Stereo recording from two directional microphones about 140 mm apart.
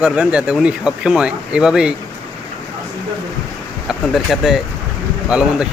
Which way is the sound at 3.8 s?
Centre (ahead or behind).